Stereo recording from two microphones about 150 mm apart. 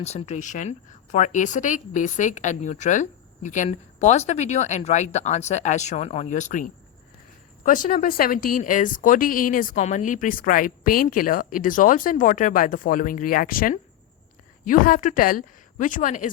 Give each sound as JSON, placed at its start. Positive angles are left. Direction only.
{"t": 0.0, "sound": "a woman's voice", "side_deg": 45}